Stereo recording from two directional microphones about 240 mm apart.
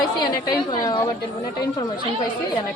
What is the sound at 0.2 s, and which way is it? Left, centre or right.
Speech, centre.